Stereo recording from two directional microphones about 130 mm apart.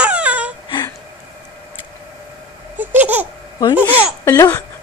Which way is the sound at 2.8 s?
15° right (ahead or behind).